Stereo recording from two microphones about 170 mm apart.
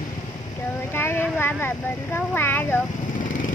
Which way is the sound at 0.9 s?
15° left (ahead or behind).